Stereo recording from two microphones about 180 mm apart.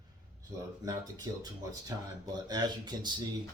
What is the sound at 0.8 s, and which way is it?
Speech, 20° right (ahead or behind).